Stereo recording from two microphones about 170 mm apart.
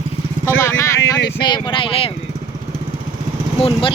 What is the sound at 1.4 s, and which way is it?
Speech, 25° left (ahead or behind).